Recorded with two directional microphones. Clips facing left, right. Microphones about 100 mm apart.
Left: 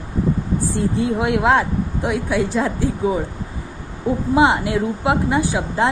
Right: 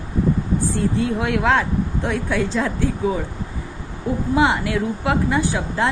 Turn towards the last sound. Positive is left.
turn(degrees=20)  # may be behind; listen again after turning